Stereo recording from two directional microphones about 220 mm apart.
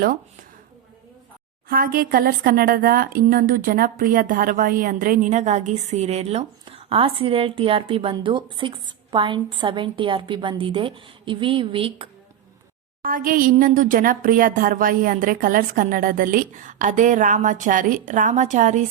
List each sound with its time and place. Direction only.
1.7 s speech: 40° right (ahead or behind); by 12.0 s 25° right (ahead or behind)
13.0 s speech: 40° right (ahead or behind)